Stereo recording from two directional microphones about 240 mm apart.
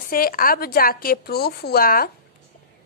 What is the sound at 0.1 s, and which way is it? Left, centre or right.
A woman's voice, left.